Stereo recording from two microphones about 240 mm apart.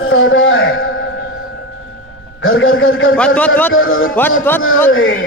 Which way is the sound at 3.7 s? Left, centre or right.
Left.